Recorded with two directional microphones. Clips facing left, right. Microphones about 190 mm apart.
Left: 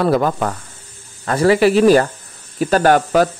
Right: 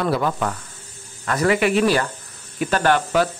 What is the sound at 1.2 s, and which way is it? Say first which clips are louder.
Speech: left 6 dB; 35° left (ahead or behind).